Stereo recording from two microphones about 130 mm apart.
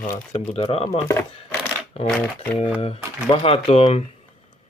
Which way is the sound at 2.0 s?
10° left (ahead or behind).